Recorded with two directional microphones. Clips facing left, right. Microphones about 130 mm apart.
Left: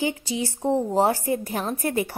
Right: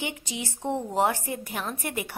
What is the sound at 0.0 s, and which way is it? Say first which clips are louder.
A woman's voice: left 8 dB; 30° left (ahead or behind).